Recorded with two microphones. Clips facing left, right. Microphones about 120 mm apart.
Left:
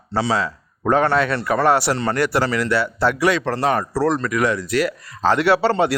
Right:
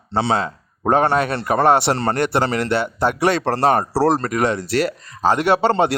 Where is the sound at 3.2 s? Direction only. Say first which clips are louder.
Right 4 dB; 30° right (ahead or behind).